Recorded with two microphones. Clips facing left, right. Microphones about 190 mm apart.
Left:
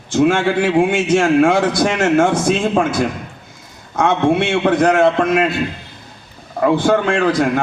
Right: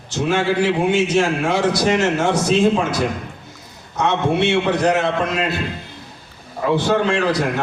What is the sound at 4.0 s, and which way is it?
A man's voice, 55° left (ahead or behind).